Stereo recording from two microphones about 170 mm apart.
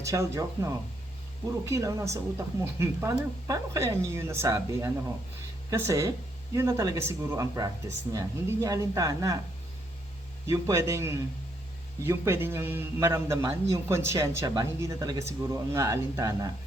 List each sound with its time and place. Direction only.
0.0 s a man's voice: 15° right (ahead or behind)
10.5 s a man's voice: 20° right (ahead or behind)